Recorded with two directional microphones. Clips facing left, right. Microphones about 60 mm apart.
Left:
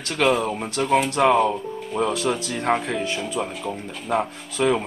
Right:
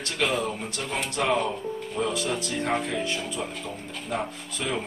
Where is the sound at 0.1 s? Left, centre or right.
Left.